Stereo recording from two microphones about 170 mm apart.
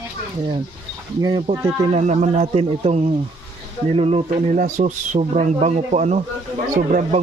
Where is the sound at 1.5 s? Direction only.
20° right (ahead or behind).